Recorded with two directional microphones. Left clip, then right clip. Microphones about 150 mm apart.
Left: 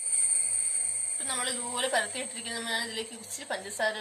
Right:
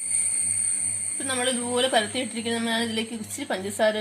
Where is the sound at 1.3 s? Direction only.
35° right (ahead or behind).